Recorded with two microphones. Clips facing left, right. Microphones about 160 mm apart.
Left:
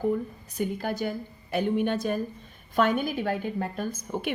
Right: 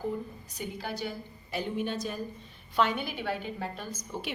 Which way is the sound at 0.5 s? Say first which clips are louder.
Left 8 dB; 50° left (ahead or behind).